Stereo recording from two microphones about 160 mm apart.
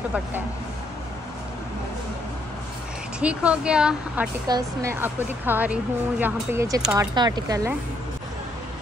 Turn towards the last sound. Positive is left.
turn(degrees=-25)  # may be behind; listen again after turning